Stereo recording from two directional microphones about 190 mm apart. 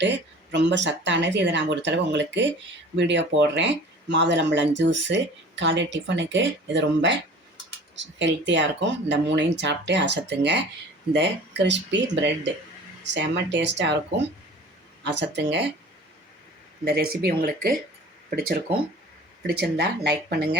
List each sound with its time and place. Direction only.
0.5 s speech: 70° right (ahead or behind)
15.0 s speech: 65° right (ahead or behind)
16.8 s speech: 55° right (ahead or behind)
19.4 s speech: 60° right (ahead or behind)